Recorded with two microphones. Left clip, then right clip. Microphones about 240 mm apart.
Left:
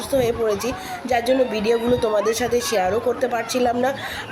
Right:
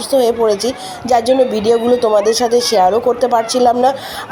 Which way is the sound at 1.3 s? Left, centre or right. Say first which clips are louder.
Right 7 dB; right.